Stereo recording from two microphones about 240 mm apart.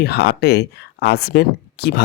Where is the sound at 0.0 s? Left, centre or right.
Left.